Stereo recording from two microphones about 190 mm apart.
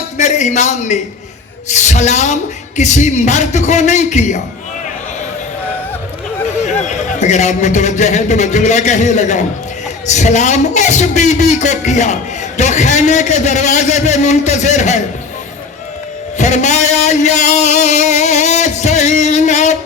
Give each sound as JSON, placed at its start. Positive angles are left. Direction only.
{"t": 0.2, "sound": "speech", "side_deg": 40}
{"t": 6.8, "sound": "speech", "side_deg": 40}
{"t": 16.4, "sound": "speech", "side_deg": 40}